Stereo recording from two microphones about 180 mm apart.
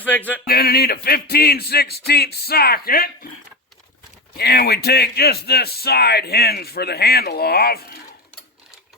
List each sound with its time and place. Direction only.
0.0 s a sound: 10° left (ahead or behind)
0.4 s speech: 55° left (ahead or behind)
4.4 s speech: 60° left (ahead or behind)